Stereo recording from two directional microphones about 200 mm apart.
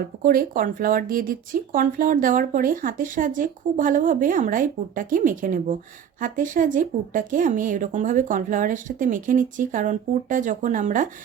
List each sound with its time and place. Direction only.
0.0 s speech: 45° right (ahead or behind)